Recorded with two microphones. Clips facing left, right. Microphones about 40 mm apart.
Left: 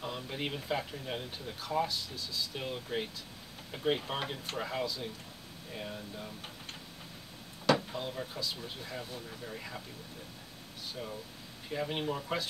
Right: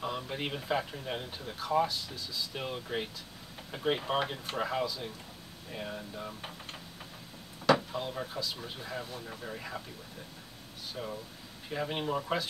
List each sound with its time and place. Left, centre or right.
0.0 s speech: centre
7.6 s a sound: centre
8.6 s speech: centre
9.3 s speech: centre
9.6 s speech: centre
11.0 s speech: centre